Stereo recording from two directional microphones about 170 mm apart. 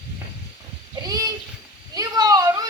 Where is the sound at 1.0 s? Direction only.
20° right (ahead or behind).